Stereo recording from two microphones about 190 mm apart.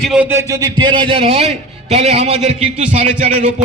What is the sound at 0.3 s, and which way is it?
A man's voice, 15° right (ahead or behind).